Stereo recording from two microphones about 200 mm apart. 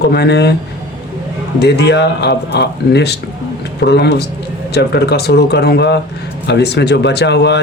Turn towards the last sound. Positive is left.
turn(degrees=60)  # may be behind; listen again after turning